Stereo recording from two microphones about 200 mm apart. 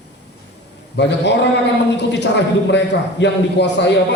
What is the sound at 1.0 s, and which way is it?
Speech, 60° left (ahead or behind).